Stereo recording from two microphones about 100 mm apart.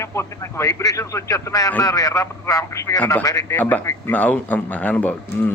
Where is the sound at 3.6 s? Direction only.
15° left (ahead or behind).